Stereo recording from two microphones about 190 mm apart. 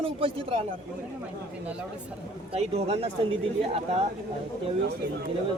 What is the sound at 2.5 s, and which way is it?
Speech, 30° right (ahead or behind).